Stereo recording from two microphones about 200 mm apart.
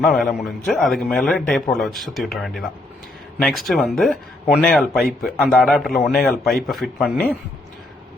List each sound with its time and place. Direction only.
0.0 s a man's voice: centre (ahead or behind)